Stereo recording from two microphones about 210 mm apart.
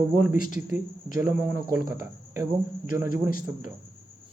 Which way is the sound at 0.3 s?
40° left (ahead or behind).